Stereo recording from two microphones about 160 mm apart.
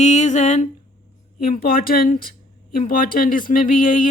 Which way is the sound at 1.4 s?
65° left (ahead or behind).